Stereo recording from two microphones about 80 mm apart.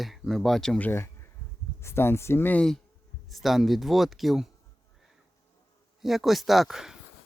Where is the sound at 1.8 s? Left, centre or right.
Left.